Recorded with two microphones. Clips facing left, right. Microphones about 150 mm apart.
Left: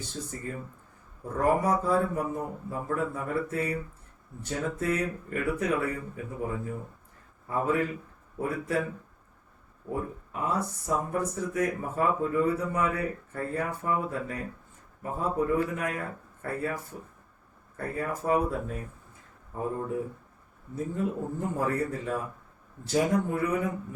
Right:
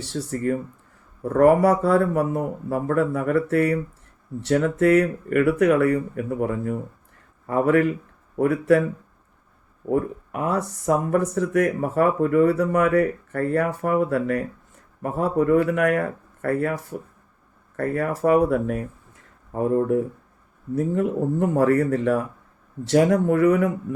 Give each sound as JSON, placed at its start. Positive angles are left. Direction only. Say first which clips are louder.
{"t": 0.0, "sound": "a man's voice", "louder": "right 11 dB", "side_deg": -80}
{"t": 9.9, "sound": "speech", "louder": "right 10 dB", "side_deg": -75}